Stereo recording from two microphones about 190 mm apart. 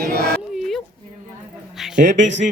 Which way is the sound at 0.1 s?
55° right (ahead or behind).